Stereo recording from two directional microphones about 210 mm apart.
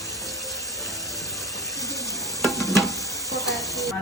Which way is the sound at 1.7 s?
15° left (ahead or behind).